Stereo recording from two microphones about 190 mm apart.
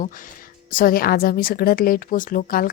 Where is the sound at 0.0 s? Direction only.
45° left (ahead or behind).